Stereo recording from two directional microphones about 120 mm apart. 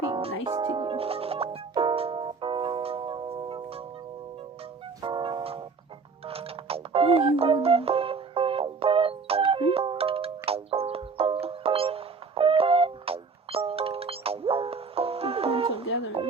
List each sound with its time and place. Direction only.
0.2 s music: 50° right (ahead or behind)
5.0 s music: 45° right (ahead or behind)